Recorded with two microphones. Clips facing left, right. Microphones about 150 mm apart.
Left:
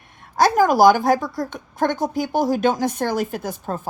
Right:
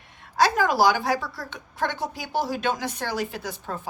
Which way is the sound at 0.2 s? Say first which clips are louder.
Left 5 dB; 45° left (ahead or behind).